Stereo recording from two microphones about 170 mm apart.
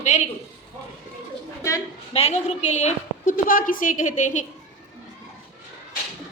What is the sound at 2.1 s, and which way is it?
A woman's voice, 40° left (ahead or behind).